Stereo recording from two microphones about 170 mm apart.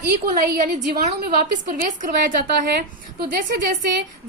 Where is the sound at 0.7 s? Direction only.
45° right (ahead or behind).